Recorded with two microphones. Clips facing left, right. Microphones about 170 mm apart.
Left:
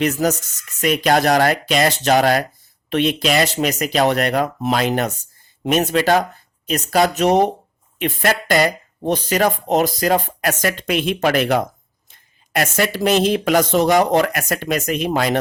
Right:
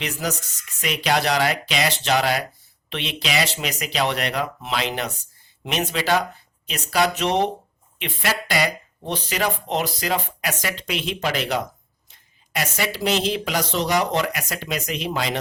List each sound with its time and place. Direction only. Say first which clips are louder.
0.0 s speech: left 9 dB; 45° left (ahead or behind)